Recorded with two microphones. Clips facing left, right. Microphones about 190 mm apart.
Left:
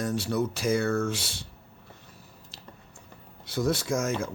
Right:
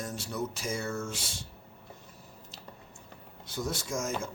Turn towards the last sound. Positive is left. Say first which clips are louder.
# left 5 dB
turn(degrees=65)  # may be behind; listen again after turning